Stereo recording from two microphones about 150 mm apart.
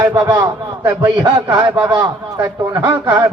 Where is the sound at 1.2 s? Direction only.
30° right (ahead or behind).